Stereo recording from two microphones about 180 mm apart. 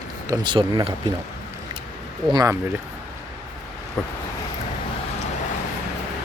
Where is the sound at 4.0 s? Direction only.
Centre (ahead or behind).